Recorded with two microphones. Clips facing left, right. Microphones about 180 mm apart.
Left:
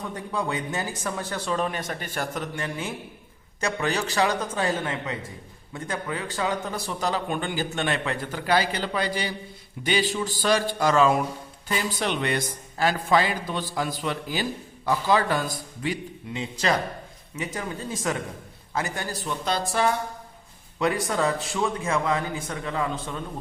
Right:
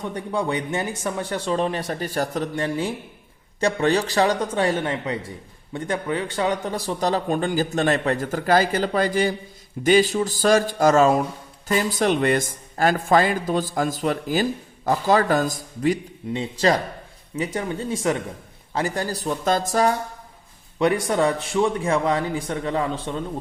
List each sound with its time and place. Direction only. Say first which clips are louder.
0.2 s a man's voice: right 4 dB; 25° right (ahead or behind)
20.7 s speech: right 5 dB; 25° right (ahead or behind)